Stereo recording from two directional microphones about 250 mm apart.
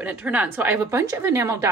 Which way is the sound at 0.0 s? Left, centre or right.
Centre.